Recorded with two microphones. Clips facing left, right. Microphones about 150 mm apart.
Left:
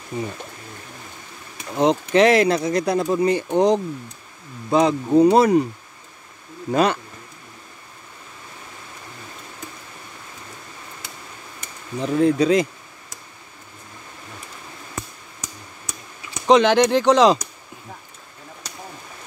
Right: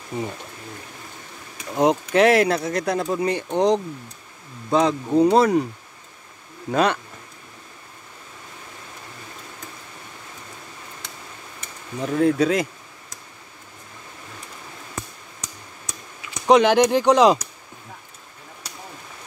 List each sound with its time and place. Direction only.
0.1 s speech: 30° right (ahead or behind)
1.8 s speech: 10° right (ahead or behind)
6.7 s speech: 5° left (ahead or behind)
12.0 s speech: 5° right (ahead or behind)
16.4 s speech: 10° right (ahead or behind)